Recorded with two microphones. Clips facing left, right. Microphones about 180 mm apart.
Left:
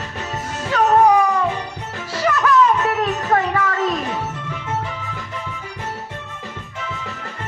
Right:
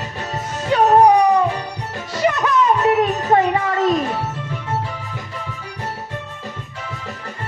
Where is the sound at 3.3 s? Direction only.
20° right (ahead or behind).